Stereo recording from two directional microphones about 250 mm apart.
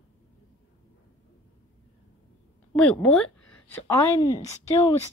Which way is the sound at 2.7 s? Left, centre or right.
Centre.